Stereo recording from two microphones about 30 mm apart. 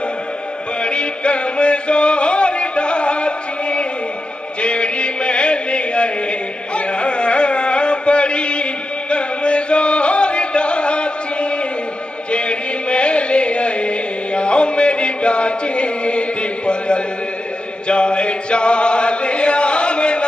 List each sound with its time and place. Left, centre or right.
0.8 s music: left
6.7 s carnatic music: left
9.1 s music: left
17.8 s chant: left